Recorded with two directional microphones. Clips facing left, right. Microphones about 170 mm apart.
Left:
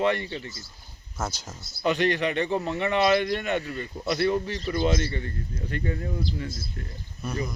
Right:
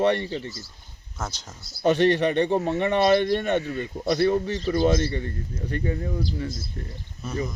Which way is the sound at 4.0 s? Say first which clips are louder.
Right 3 dB; 40° right (ahead or behind).